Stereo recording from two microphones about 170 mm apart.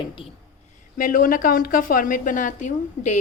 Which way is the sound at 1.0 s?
55° left (ahead or behind).